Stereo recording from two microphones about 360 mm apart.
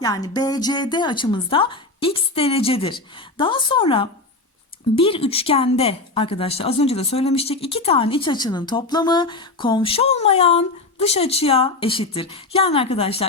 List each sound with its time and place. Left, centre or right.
0.0 s a woman's voice: centre